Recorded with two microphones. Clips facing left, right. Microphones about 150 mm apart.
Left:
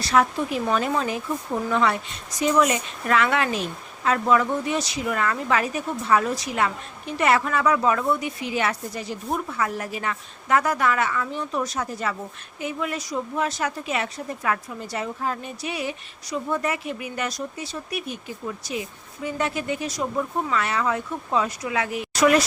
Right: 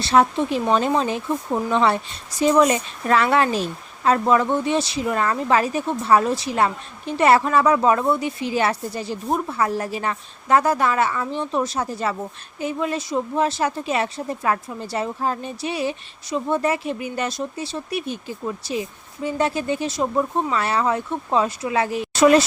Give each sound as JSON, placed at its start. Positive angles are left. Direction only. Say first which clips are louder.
{"t": 0.0, "sound": "a woman's voice", "louder": "right 4 dB", "side_deg": -30}